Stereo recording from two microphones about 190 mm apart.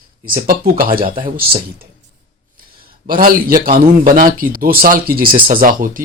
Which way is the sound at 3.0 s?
50° right (ahead or behind).